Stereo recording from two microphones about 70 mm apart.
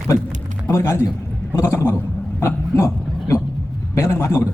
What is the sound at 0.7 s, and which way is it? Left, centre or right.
A man's voice, left.